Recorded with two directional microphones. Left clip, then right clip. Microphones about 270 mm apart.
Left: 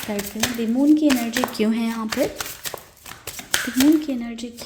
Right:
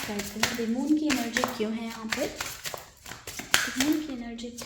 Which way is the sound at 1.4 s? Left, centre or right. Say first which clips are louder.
Left 6 dB; left.